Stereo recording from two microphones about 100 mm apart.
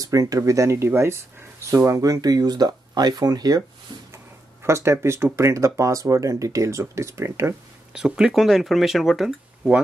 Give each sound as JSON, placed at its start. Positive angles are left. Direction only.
{"t": 0.0, "sound": "speech", "side_deg": -35}
{"t": 4.6, "sound": "speech", "side_deg": -25}
{"t": 7.9, "sound": "speech", "side_deg": -5}